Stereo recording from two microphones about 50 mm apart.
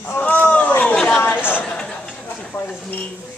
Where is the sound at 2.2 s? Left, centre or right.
Left.